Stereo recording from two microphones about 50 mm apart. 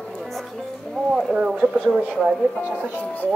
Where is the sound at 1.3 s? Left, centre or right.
Right.